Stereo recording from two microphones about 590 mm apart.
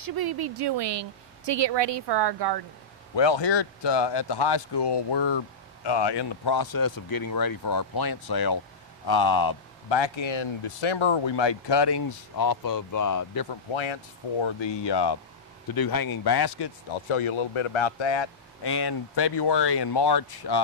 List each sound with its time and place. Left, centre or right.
0.0 s a woman's voice: right
3.2 s speech: left